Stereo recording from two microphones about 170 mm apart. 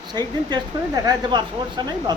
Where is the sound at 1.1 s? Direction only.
25° right (ahead or behind).